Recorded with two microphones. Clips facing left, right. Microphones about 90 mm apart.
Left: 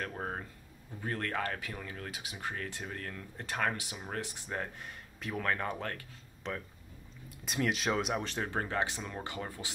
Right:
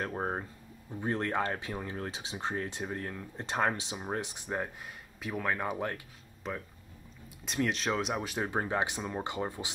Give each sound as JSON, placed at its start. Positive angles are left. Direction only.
{"t": 0.0, "sound": "speech", "side_deg": -25}
{"t": 4.8, "sound": "speech", "side_deg": -5}
{"t": 6.4, "sound": "speech", "side_deg": -5}